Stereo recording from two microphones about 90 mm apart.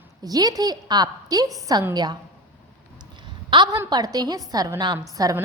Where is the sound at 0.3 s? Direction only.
45° right (ahead or behind).